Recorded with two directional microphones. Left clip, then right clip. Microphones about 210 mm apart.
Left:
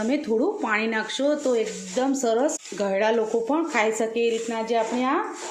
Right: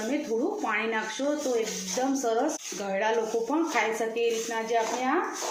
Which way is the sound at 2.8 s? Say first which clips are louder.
Left 5 dB; 55° left (ahead or behind).